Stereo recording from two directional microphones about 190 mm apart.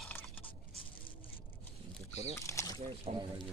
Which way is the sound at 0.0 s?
10° left (ahead or behind).